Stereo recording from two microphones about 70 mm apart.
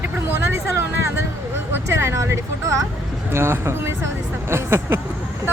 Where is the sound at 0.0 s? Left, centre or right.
Right.